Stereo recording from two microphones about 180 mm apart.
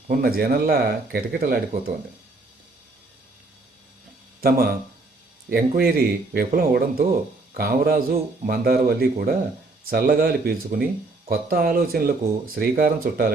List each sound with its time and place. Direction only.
0.1 s speech: 55° right (ahead or behind)
4.4 s speech: 55° right (ahead or behind)